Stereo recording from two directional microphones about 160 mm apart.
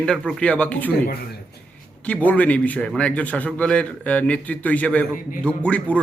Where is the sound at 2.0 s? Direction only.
10° left (ahead or behind).